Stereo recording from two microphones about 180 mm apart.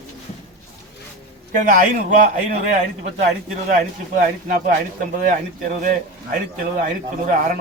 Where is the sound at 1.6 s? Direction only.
45° right (ahead or behind).